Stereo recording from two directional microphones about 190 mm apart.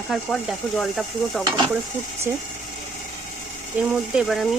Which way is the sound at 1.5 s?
25° right (ahead or behind).